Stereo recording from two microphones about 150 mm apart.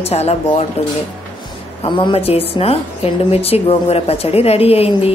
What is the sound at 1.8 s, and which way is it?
Speech, 35° left (ahead or behind).